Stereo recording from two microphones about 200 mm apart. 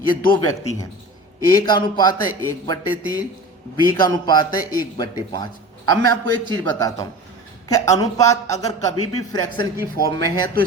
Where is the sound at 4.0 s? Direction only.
20° left (ahead or behind).